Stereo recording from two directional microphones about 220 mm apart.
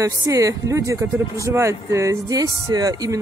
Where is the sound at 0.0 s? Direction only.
15° right (ahead or behind).